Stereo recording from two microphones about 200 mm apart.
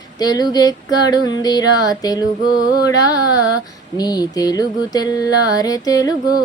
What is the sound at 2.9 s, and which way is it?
Music, 20° left (ahead or behind).